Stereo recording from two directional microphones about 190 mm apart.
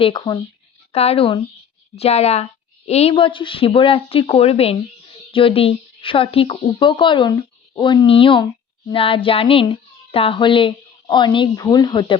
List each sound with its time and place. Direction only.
0.0 s a woman's voice: 25° left (ahead or behind)